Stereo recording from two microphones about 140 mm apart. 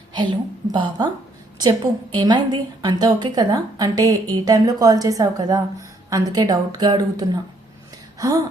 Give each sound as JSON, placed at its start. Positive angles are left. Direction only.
{"t": 0.1, "sound": "a woman's voice", "side_deg": -35}